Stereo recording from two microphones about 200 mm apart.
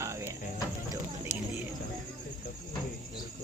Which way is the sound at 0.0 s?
15° right (ahead or behind).